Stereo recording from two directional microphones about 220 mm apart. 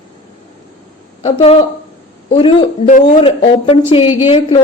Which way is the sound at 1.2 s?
30° left (ahead or behind).